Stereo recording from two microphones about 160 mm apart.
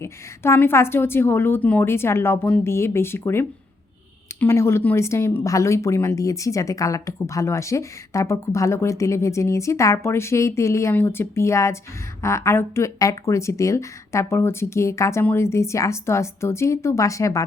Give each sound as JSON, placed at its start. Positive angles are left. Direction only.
{"t": 0.0, "sound": "a woman's voice", "side_deg": 15}